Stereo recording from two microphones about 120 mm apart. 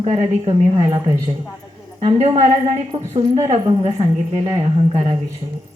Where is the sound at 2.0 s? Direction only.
60° right (ahead or behind).